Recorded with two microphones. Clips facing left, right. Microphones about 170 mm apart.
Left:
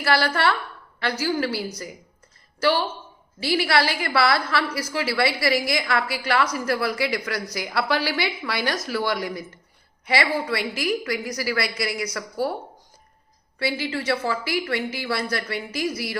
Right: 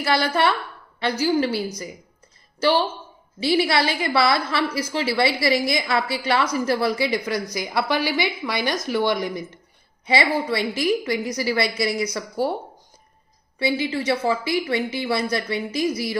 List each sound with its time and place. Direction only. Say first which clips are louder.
0.0 s a woman's voice: right 1 dB; 20° right (ahead or behind)
13.6 s a woman's voice: right 3 dB; 20° right (ahead or behind)